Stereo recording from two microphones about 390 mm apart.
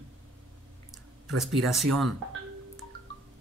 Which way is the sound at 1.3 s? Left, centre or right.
Centre.